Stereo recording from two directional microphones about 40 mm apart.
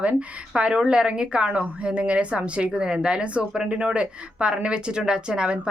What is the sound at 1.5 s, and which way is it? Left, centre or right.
A woman's voice, right.